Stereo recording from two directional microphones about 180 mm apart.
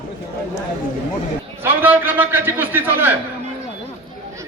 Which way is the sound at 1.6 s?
10° right (ahead or behind).